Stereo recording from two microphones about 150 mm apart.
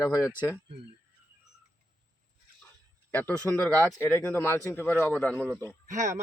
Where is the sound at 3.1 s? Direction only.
10° left (ahead or behind).